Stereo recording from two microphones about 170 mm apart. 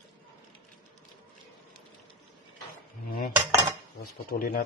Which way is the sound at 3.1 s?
65° left (ahead or behind).